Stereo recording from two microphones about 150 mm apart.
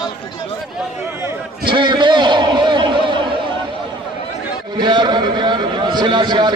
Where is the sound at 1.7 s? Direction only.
35° right (ahead or behind).